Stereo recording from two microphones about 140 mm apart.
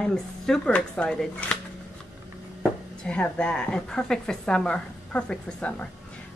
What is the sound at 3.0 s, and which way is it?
A woman's voice, 5° left (ahead or behind).